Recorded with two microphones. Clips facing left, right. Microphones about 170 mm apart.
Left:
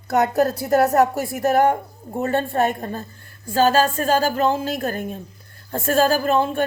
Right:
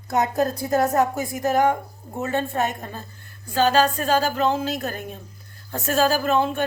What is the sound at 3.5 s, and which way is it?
A woman's voice, 45° left (ahead or behind).